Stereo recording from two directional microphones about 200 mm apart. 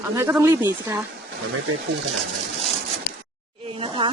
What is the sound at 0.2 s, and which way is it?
Speech, 10° right (ahead or behind).